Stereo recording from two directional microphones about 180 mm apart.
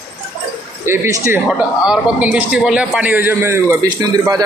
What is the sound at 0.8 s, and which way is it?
Speech, 15° right (ahead or behind).